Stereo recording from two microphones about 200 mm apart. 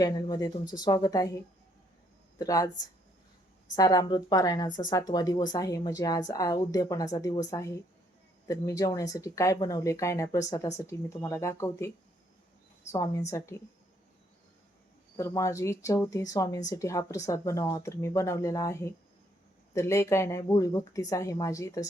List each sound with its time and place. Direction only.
0.0 s a woman's voice: 20° left (ahead or behind)
2.4 s a woman's voice: 15° left (ahead or behind)
3.8 s a woman's voice: 20° left (ahead or behind)
12.9 s a woman's voice: 15° left (ahead or behind)
15.2 s a woman's voice: 15° left (ahead or behind)